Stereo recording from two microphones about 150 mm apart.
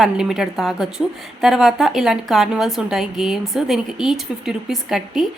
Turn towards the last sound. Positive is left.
turn(degrees=0)  # may be behind; listen again after turning